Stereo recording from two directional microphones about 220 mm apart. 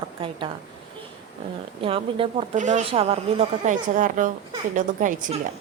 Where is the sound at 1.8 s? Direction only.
25° right (ahead or behind).